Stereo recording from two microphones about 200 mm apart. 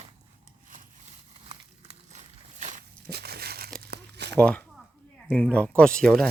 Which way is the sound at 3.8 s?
55° right (ahead or behind).